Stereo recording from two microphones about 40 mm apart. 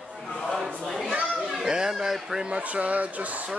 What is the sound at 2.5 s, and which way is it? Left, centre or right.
Speech, right.